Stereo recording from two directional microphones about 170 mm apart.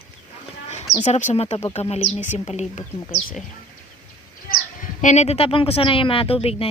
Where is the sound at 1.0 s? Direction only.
45° left (ahead or behind).